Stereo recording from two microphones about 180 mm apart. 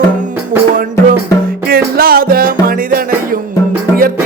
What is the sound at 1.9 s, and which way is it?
Music, 55° right (ahead or behind).